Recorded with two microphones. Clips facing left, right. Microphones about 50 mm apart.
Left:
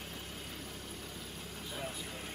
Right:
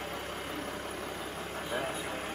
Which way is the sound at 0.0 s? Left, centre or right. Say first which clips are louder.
Right 8 dB; right.